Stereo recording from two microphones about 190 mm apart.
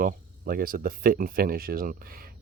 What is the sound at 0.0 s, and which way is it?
Speech, 50° right (ahead or behind).